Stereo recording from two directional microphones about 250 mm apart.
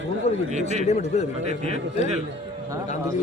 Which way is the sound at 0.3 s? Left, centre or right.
Left.